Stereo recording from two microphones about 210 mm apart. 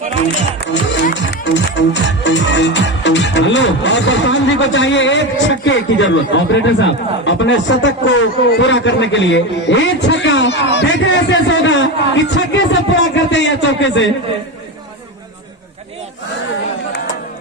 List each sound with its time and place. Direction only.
0.6 s a man's voice: 55° left (ahead or behind)